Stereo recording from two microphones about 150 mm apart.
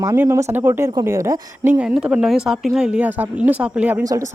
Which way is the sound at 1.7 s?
5° right (ahead or behind).